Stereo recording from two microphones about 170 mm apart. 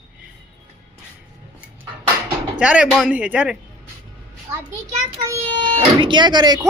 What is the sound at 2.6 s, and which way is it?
Speech, 5° right (ahead or behind).